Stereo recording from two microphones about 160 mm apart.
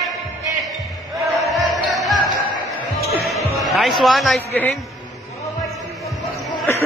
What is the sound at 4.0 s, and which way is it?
Speech, centre (ahead or behind).